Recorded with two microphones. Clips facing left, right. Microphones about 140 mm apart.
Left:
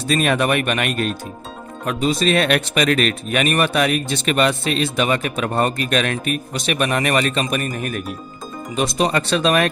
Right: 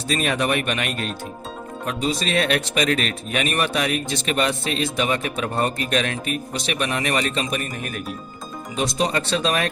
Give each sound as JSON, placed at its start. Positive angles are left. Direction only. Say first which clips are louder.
{"t": 0.1, "sound": "speech", "louder": "left 4 dB", "side_deg": 60}
{"t": 8.7, "sound": "speech", "louder": "left 3 dB", "side_deg": 65}